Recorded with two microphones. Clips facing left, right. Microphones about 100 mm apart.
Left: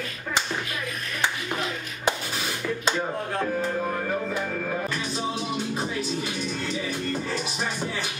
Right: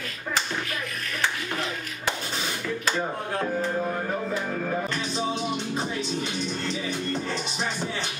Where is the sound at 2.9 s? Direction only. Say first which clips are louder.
Left 1 dB; centre (ahead or behind).